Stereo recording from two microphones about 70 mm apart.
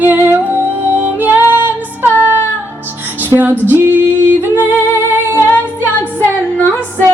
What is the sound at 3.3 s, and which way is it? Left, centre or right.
Female singing, right.